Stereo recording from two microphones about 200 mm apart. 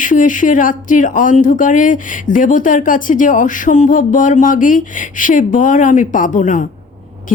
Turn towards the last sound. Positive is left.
turn(degrees=40)  # may be behind; listen again after turning